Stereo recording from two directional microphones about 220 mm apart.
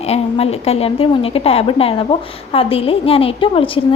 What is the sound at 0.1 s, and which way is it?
A woman's voice, 30° left (ahead or behind).